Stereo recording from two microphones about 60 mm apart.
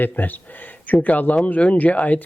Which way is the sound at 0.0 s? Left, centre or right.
Left.